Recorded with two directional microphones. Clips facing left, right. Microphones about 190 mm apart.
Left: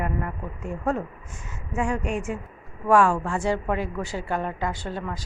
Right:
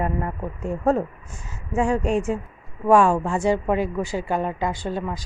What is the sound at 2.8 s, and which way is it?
A woman's voice, 20° right (ahead or behind).